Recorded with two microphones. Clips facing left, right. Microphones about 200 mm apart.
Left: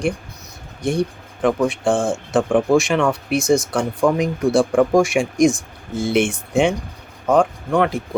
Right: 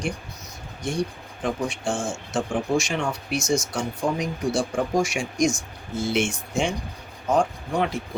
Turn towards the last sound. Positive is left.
turn(degrees=55)  # may be behind; listen again after turning